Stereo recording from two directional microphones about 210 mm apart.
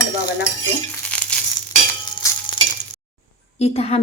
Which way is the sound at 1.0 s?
5° left (ahead or behind).